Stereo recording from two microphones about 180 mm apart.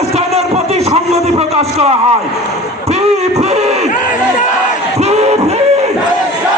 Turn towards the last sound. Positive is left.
turn(degrees=-40)  # may be behind; listen again after turning